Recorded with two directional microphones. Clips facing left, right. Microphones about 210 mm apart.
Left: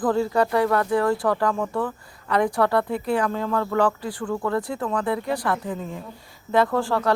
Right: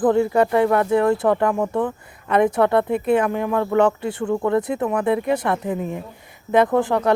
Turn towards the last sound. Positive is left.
turn(degrees=-20)  # may be behind; listen again after turning